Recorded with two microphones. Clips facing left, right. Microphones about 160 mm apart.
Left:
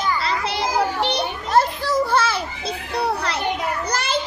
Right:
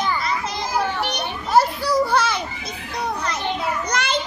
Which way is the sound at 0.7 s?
30° left (ahead or behind).